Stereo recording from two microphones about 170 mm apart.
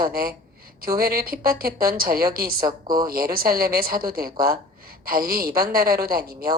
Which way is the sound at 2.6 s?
20° right (ahead or behind).